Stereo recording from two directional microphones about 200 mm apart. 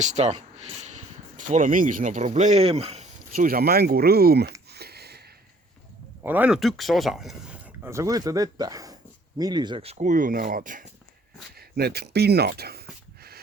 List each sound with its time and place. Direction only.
0.0 s speech: 35° right (ahead or behind)
3.3 s speech: 45° right (ahead or behind)
4.7 s a sound: 55° right (ahead or behind)
6.2 s speech: 10° right (ahead or behind)
7.9 s speech: 15° right (ahead or behind); by 10.8 s 40° right (ahead or behind)
11.5 s speech: 50° right (ahead or behind)